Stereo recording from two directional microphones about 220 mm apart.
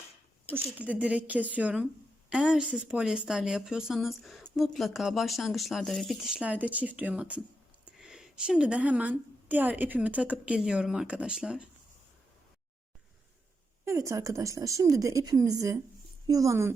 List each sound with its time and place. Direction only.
0.5 s a woman's voice: 5° right (ahead or behind)
13.8 s a woman's voice: 15° right (ahead or behind)